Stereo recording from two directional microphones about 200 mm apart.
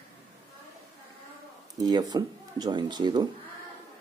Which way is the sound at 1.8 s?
20° right (ahead or behind).